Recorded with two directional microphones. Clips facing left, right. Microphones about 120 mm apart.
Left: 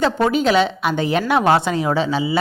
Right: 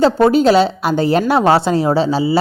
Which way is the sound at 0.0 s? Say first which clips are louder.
Right 6 dB; 35° right (ahead or behind).